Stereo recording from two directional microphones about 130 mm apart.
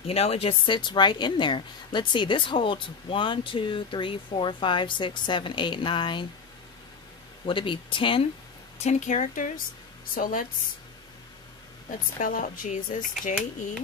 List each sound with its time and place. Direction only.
0.0 s a woman's voice: 50° left (ahead or behind)
7.4 s a woman's voice: 40° left (ahead or behind)
8.7 s speech: 65° left (ahead or behind)
10.1 s speech: 90° left
12.2 s speech: 90° left